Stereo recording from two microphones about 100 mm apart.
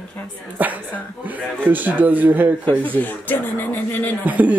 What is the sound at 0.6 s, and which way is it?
Speech, 15° right (ahead or behind).